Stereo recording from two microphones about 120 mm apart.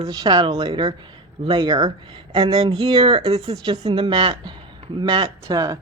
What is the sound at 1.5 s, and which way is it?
Speech, 35° right (ahead or behind).